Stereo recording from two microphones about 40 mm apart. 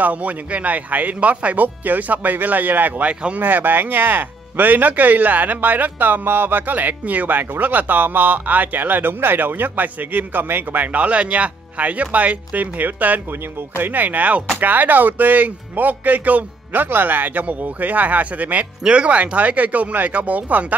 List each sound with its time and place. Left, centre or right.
0.0 s speech: right
3.1 s speech: right
3.3 s speech: right